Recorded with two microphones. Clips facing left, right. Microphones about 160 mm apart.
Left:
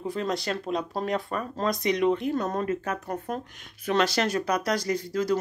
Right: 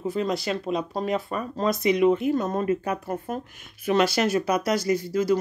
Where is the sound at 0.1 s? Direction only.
5° right (ahead or behind).